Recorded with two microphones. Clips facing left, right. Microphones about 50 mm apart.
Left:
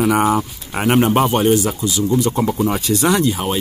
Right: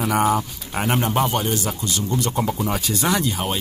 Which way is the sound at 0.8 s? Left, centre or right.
Left.